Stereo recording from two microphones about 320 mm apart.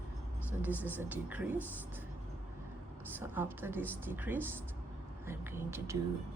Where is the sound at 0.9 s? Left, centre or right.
Centre.